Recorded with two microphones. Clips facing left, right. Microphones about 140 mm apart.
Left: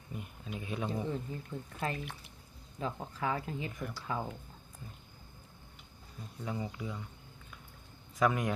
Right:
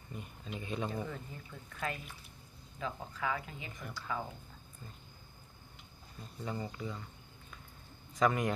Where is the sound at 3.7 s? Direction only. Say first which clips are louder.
Left 5 dB; centre (ahead or behind).